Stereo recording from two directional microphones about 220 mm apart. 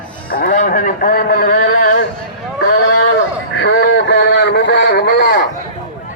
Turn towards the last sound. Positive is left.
turn(degrees=45)  # may be behind; listen again after turning